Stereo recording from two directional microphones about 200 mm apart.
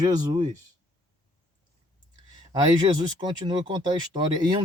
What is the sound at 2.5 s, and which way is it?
Speech, 20° right (ahead or behind).